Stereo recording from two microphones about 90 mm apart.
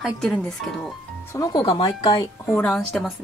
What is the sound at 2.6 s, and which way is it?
Speech, 5° left (ahead or behind).